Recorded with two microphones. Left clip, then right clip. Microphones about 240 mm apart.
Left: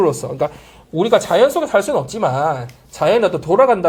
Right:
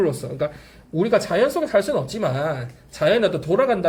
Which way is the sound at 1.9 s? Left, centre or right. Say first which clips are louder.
Left 5 dB; centre.